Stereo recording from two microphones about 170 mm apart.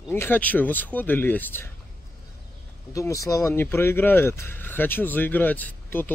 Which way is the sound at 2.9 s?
20° left (ahead or behind).